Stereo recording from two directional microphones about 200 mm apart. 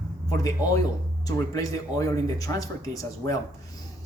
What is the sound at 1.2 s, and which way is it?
Speech, 15° left (ahead or behind).